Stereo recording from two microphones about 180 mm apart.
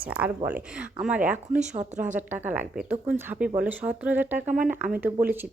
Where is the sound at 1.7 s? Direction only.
40° right (ahead or behind).